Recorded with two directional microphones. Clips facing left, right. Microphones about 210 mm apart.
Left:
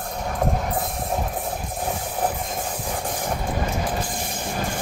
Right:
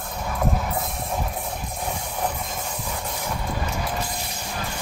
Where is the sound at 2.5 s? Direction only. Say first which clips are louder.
Left 3 dB; 50° left (ahead or behind).